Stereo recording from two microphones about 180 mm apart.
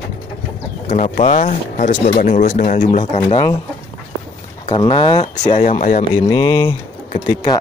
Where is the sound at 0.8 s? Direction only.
40° left (ahead or behind).